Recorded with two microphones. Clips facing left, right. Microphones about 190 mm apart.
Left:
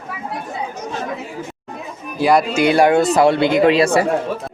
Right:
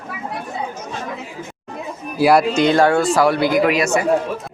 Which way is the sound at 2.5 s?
10° left (ahead or behind).